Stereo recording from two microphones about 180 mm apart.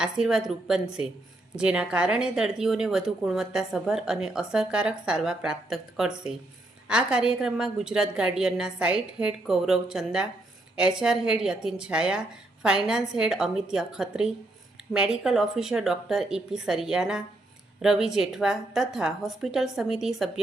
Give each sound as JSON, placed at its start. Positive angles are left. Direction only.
{"t": 0.0, "sound": "a woman's voice", "side_deg": -5}